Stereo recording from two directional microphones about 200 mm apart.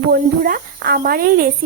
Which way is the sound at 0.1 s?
50° right (ahead or behind).